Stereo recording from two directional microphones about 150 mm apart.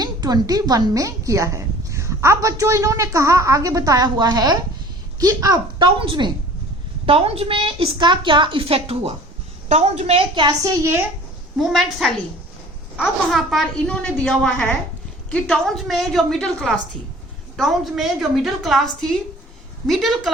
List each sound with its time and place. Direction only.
0.0 s a woman's voice: 25° right (ahead or behind)
11.5 s a woman's voice: 5° right (ahead or behind)